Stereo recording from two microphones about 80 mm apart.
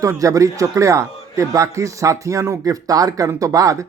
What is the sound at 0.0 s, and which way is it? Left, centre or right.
A man's voice, right.